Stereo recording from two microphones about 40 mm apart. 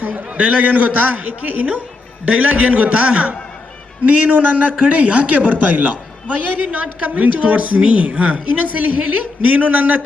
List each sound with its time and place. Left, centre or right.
0.1 s a man's voice: right
4.3 s a man's voice: right
4.8 s a man's voice: right